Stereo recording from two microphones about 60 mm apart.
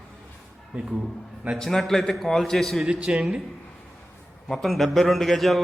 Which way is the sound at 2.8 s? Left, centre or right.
Centre.